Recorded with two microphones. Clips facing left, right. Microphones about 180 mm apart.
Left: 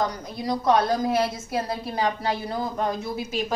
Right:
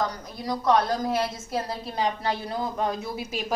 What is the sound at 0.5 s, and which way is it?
A woman's voice, 10° left (ahead or behind).